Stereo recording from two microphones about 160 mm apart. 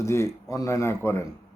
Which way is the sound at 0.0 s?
15° left (ahead or behind).